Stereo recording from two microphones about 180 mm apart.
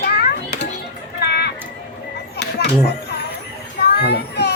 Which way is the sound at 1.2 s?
65° left (ahead or behind).